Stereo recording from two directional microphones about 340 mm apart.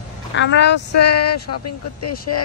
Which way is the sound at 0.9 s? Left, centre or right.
Left.